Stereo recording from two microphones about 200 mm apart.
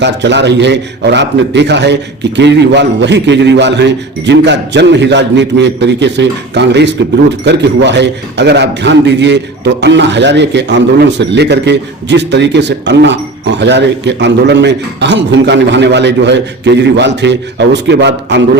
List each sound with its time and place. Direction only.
0.0 s a man's voice: 60° right (ahead or behind)